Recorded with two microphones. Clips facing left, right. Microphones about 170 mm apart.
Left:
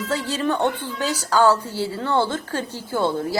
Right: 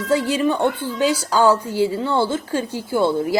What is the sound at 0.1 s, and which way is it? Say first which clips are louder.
A woman's voice: right 6 dB; 10° right (ahead or behind).